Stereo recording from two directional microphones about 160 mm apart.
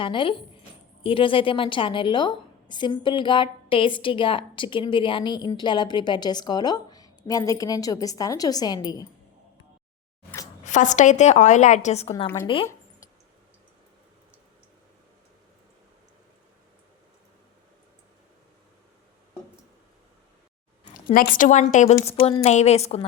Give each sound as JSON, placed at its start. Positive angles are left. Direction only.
{"t": 0.0, "sound": "a woman's voice", "side_deg": 30}
{"t": 10.6, "sound": "a woman's voice", "side_deg": 50}
{"t": 12.5, "sound": "speech", "side_deg": 30}
{"t": 20.9, "sound": "a woman's voice", "side_deg": 60}